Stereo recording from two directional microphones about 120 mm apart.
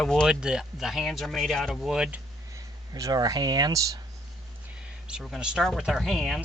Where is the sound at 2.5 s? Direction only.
30° right (ahead or behind).